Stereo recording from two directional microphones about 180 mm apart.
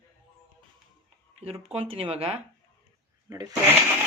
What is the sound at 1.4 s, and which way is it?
Speech, 35° right (ahead or behind).